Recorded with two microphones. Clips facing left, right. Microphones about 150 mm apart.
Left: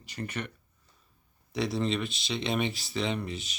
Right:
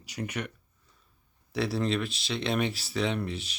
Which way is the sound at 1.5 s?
Centre (ahead or behind).